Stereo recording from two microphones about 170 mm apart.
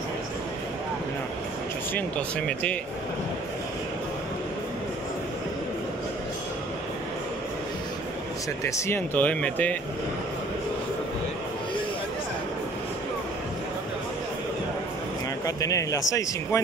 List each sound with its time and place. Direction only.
2.0 s speech: 5° left (ahead or behind)
8.6 s speech: 15° left (ahead or behind)
15.4 s speech: 20° left (ahead or behind)